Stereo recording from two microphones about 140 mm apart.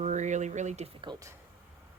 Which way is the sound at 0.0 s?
60° right (ahead or behind).